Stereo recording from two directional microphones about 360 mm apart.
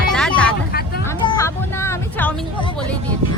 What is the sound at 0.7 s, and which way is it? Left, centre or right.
Hubbub, left.